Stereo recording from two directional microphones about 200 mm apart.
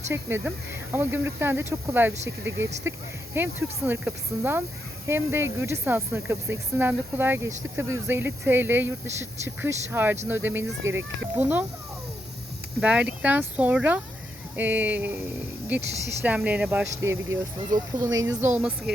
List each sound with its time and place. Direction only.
0.1 s speech: 10° right (ahead or behind)
2.2 s speech: 65° right (ahead or behind)
2.8 s speech: 10° right (ahead or behind)
12.8 s speech: 5° right (ahead or behind)
18.4 s speech: 10° right (ahead or behind)